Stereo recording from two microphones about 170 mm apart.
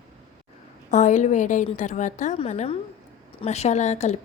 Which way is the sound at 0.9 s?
45° left (ahead or behind).